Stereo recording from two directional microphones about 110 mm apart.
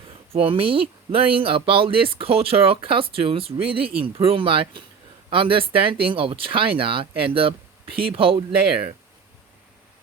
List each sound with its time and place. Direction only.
0.3 s speech: 55° right (ahead or behind)